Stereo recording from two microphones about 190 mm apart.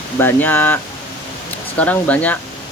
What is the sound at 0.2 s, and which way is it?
Speech, 10° left (ahead or behind).